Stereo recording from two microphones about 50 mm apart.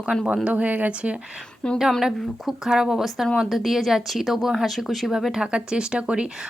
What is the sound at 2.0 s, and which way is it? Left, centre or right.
A woman's voice, centre.